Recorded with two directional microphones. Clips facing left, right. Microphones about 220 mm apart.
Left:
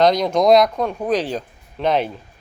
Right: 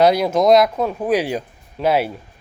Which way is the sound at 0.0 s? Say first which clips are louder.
Right 1 dB; 10° right (ahead or behind).